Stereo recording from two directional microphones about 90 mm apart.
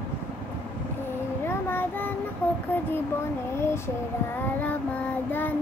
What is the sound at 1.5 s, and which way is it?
Child singing, 25° left (ahead or behind).